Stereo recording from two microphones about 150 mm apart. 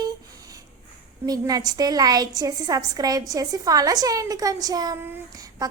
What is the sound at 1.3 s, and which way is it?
A woman's voice, 25° right (ahead or behind).